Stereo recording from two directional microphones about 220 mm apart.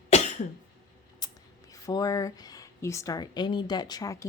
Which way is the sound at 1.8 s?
15° left (ahead or behind).